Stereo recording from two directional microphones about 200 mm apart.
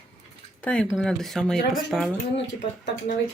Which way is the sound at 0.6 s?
5° left (ahead or behind).